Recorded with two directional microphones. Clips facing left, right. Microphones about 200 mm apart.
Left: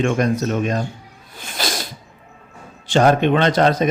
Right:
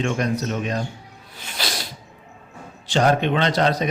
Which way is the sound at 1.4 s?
50° left (ahead or behind).